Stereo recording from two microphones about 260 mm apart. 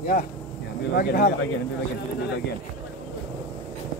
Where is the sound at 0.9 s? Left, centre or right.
Left.